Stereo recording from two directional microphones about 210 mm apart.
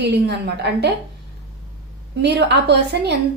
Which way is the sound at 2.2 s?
50° right (ahead or behind).